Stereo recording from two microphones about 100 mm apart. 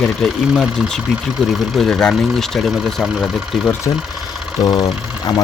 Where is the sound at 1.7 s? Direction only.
10° left (ahead or behind).